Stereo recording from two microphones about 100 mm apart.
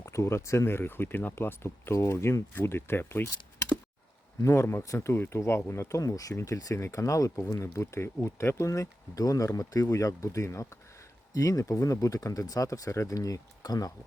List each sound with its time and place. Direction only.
0.0 s speech: 30° left (ahead or behind)